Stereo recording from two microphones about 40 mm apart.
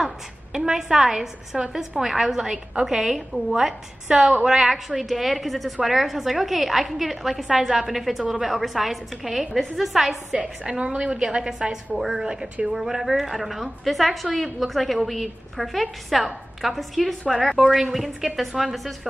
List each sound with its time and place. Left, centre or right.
0.5 s a woman's voice: centre
10.4 s a woman's voice: right
12.0 s a woman's voice: centre
17.9 s a woman's voice: centre